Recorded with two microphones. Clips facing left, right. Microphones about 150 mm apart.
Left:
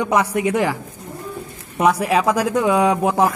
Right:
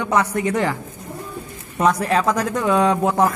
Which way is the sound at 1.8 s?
10° left (ahead or behind).